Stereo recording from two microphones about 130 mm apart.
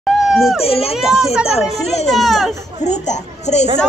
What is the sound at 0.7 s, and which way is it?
Speech, 50° left (ahead or behind).